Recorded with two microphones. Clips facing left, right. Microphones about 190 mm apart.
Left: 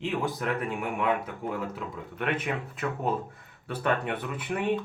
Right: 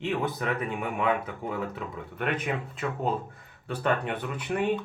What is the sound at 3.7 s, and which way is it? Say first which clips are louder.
Speech: right 1 dB; centre (ahead or behind).